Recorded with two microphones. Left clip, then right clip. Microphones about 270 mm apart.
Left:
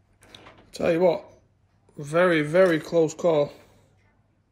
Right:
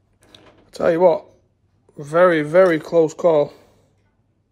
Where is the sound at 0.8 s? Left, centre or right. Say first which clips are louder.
Right 6 dB; centre.